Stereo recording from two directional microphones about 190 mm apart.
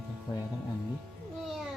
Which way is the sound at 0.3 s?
20° left (ahead or behind).